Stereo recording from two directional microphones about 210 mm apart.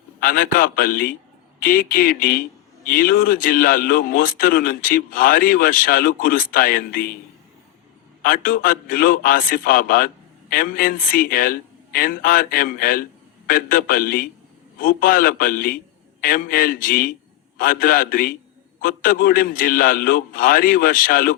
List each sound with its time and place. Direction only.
0.2 s a man's voice: 45° left (ahead or behind)
8.2 s a man's voice: 45° left (ahead or behind)